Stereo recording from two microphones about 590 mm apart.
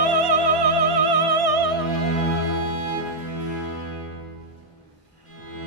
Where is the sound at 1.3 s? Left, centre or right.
Right.